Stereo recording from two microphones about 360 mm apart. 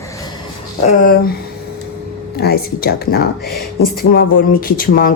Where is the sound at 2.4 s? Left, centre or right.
Left.